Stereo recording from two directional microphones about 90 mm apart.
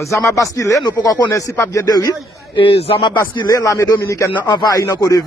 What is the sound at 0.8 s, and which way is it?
Speech, 50° left (ahead or behind).